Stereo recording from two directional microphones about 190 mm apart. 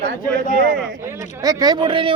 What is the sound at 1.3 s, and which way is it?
Speech, 20° right (ahead or behind).